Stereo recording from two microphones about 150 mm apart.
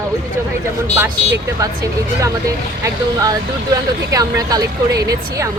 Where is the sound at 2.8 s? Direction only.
25° right (ahead or behind).